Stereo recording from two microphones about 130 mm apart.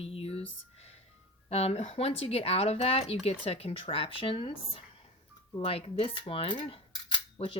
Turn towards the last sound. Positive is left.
turn(degrees=45)  # may be behind; listen again after turning